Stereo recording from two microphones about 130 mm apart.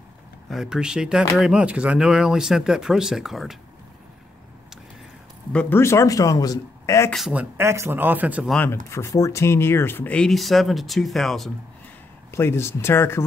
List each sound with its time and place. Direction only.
0.5 s speech: 5° right (ahead or behind)
5.5 s speech: 10° left (ahead or behind)
5.8 s speech: 20° left (ahead or behind)
7.1 s speech: centre (ahead or behind)
7.3 s speech: 20° right (ahead or behind)
8.9 s speech: 25° left (ahead or behind); by 11.5 s centre (ahead or behind)
12.3 s speech: 20° left (ahead or behind)